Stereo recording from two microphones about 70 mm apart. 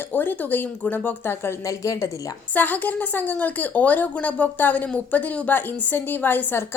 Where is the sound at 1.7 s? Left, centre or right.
Left.